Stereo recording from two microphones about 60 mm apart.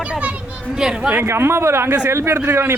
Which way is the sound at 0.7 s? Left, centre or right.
Centre.